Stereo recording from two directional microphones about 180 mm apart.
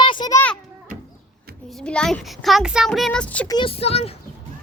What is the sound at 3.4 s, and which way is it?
Speech, 25° left (ahead or behind).